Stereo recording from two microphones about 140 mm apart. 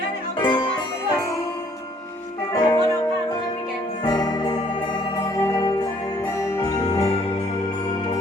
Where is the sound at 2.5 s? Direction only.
25° left (ahead or behind).